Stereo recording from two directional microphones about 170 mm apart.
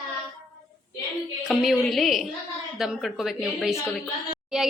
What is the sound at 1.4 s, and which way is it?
Speech, centre (ahead or behind).